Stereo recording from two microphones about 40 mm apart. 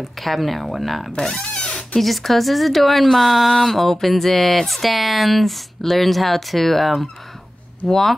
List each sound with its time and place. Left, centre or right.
0.2 s speech: centre
1.1 s speech: centre
1.5 s a sound: centre
2.0 s speech: centre